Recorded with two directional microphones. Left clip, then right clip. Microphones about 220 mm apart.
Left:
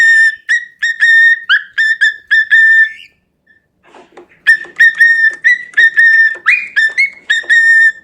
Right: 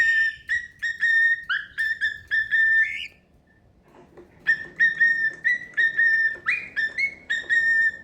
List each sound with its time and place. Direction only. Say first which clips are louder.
0.2 s whistle: left 14 dB; 45° left (ahead or behind)
3.9 s whistle: left 11 dB; 45° left (ahead or behind)
5.3 s music: left 13 dB; 45° left (ahead or behind)